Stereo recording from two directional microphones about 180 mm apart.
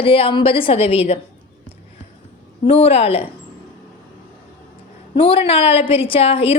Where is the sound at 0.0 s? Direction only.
30° left (ahead or behind).